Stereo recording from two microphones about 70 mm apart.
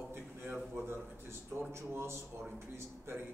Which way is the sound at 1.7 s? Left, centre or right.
Right.